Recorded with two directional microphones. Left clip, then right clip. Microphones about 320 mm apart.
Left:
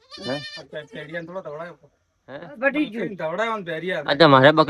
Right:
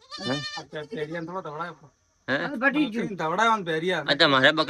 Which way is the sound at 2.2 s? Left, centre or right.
Centre.